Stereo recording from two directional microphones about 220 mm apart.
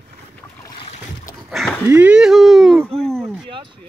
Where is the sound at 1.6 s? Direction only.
Centre (ahead or behind).